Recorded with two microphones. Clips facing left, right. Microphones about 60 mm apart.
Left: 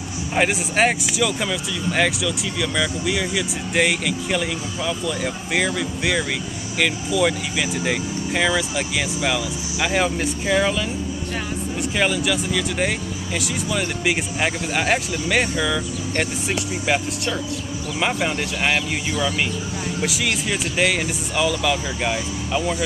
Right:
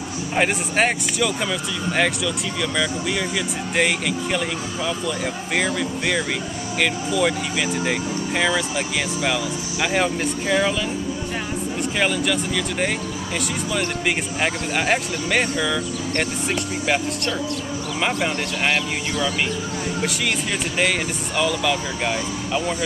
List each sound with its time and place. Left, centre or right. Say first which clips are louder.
0.3 s speech: left 1 dB; centre